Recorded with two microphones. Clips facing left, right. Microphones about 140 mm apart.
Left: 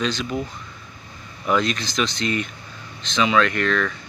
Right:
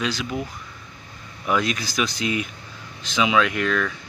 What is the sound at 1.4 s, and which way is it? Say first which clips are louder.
Speech: left 2 dB; 5° right (ahead or behind).